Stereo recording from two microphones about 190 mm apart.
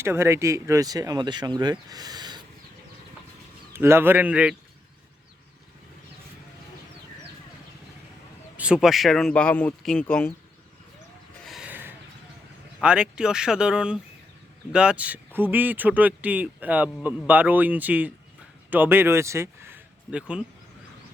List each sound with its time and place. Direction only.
0.0 s speech: 15° right (ahead or behind)
3.7 s speech: 10° right (ahead or behind)
8.5 s speech: 5° right (ahead or behind)
11.4 s a sound: 5° right (ahead or behind)
12.8 s speech: 5° right (ahead or behind)